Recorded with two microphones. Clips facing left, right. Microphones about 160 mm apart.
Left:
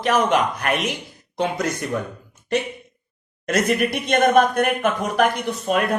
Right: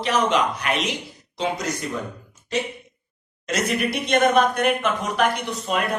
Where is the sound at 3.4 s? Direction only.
50° left (ahead or behind).